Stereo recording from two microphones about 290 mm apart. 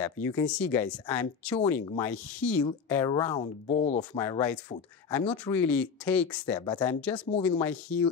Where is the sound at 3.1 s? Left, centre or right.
Left.